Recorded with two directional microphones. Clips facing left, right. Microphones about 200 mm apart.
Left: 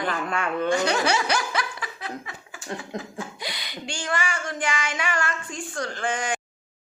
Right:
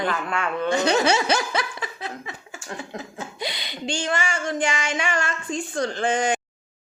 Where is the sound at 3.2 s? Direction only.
25° right (ahead or behind).